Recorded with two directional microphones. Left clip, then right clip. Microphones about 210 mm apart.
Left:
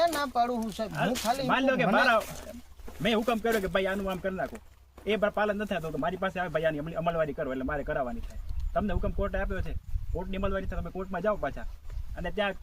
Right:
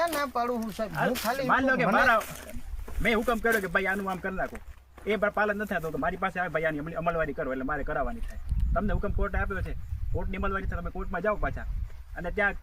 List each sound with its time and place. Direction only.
0.0 s speech: 10° right (ahead or behind)
1.5 s speech: 15° left (ahead or behind)